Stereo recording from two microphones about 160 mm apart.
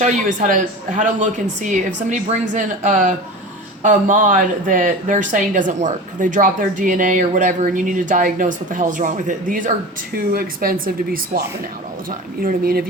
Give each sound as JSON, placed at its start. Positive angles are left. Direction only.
{"t": 0.0, "sound": "speech", "side_deg": -50}
{"t": 10.3, "sound": "speech", "side_deg": -65}